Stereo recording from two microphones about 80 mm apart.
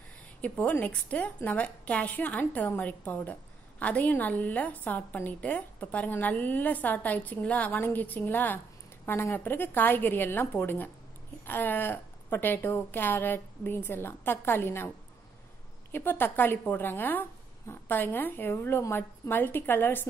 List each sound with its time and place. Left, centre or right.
0.4 s a woman's voice: centre
15.9 s a woman's voice: left